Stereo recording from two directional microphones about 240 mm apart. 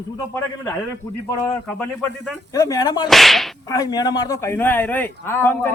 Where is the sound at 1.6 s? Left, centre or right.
Centre.